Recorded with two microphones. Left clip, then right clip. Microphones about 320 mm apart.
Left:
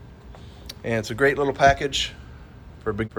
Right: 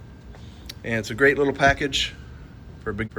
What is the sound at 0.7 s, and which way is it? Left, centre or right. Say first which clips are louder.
Speech: left 1 dB; centre.